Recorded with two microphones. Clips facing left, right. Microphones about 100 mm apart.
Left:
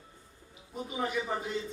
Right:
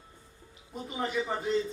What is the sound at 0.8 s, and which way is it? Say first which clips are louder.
Speech: right 1 dB; 5° left (ahead or behind).